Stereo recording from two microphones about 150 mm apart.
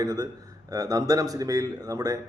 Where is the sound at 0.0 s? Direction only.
25° right (ahead or behind).